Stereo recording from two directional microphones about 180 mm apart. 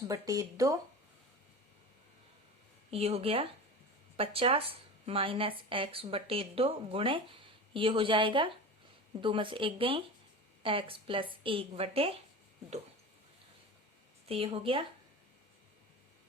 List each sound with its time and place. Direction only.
0.1 s speech: 20° right (ahead or behind)
2.9 s speech: 35° right (ahead or behind)
14.3 s speech: 30° right (ahead or behind)